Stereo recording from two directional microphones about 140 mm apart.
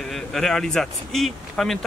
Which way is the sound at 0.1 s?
Centre (ahead or behind).